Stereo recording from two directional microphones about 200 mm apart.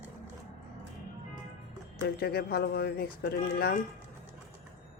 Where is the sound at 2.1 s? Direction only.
50° left (ahead or behind).